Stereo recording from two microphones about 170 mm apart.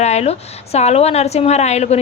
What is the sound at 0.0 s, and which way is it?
A woman's voice, 40° left (ahead or behind).